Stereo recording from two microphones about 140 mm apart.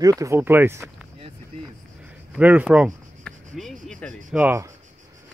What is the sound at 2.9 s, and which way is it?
Speech, centre (ahead or behind).